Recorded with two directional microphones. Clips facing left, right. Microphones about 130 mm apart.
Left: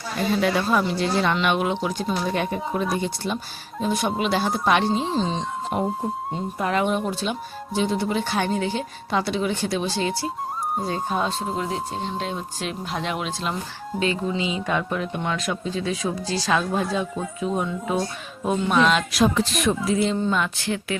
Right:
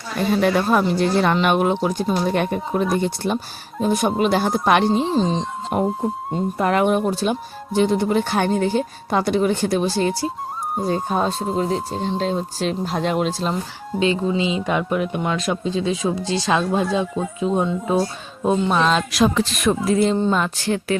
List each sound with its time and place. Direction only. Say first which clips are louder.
0.4 s speech: right 4 dB; 50° right (ahead or behind)
4.9 s speech: right 5 dB; centre (ahead or behind)
5.7 s speech: right 5 dB; 55° right (ahead or behind)
7.8 s speech: right 5 dB; 55° right (ahead or behind); by 13.5 s 40° right (ahead or behind)
14.0 s speech: right 5 dB; 25° right (ahead or behind)
15.3 s speech: right 4 dB; 25° right (ahead or behind)
19.1 s speech: right 2 dB; 90° right
19.8 s speech: right 4 dB; 55° right (ahead or behind)
20.3 s speech: right 4 dB; 40° right (ahead or behind)